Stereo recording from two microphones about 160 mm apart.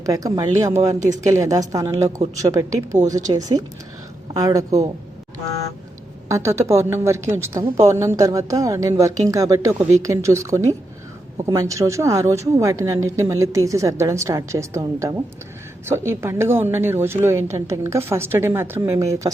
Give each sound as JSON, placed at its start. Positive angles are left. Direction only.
{"t": 0.0, "sound": "a woman's voice", "side_deg": -20}
{"t": 6.2, "sound": "a woman's voice", "side_deg": -20}